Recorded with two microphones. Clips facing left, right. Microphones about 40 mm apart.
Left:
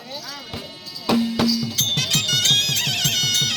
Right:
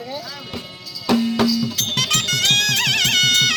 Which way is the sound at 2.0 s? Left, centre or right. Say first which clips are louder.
Right 3 dB; right.